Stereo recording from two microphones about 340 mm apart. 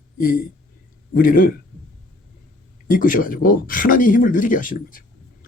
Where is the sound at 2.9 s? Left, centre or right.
Left.